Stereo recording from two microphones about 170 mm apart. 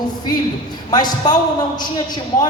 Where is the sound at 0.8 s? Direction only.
25° left (ahead or behind).